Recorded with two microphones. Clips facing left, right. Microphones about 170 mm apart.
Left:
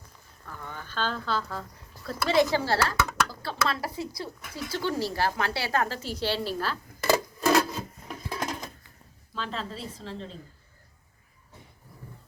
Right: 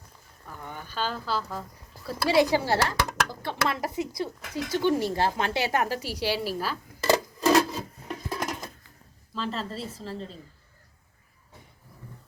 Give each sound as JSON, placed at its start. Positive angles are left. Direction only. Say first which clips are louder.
{"t": 0.4, "sound": "speech", "louder": "right 1 dB", "side_deg": -15}
{"t": 7.1, "sound": "a sound", "louder": "right 2 dB", "side_deg": 0}
{"t": 9.3, "sound": "a woman's voice", "louder": "right 3 dB", "side_deg": 0}